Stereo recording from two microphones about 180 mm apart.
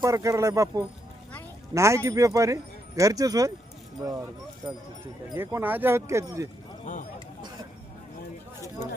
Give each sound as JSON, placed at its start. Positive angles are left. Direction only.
{"t": 0.0, "sound": "speech", "side_deg": -15}
{"t": 5.3, "sound": "speech", "side_deg": -15}
{"t": 6.9, "sound": "speech", "side_deg": 45}